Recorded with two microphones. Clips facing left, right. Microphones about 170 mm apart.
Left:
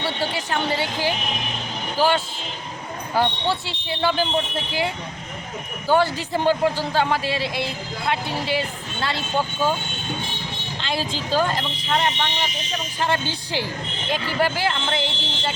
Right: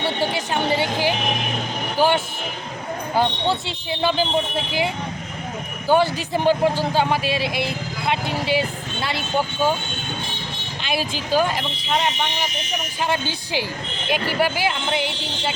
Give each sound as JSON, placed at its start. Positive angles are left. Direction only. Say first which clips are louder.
{"t": 0.0, "sound": "a sound", "louder": "right 3 dB", "side_deg": -15}
{"t": 2.0, "sound": "vehicle", "louder": "right 1 dB", "side_deg": -20}
{"t": 3.2, "sound": "speech", "louder": "right 1 dB", "side_deg": -20}
{"t": 5.9, "sound": "speech", "louder": "right 1 dB", "side_deg": -15}
{"t": 10.8, "sound": "speech", "louder": "right 1 dB", "side_deg": -10}